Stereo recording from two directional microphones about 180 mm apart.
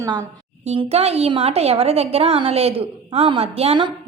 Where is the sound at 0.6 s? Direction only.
35° right (ahead or behind).